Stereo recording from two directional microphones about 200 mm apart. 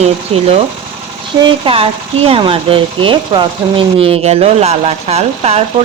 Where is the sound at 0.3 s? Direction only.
30° right (ahead or behind).